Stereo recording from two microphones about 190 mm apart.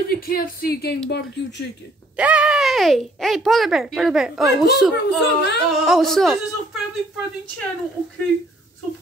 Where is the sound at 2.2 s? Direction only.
5° right (ahead or behind).